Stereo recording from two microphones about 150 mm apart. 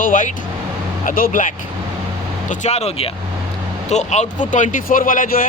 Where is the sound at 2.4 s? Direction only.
50° left (ahead or behind).